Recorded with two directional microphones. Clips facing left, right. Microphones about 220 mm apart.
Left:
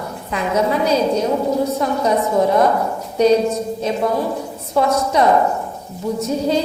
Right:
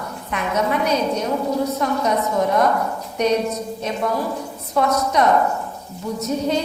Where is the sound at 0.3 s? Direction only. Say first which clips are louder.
Left 3 dB; 30° left (ahead or behind).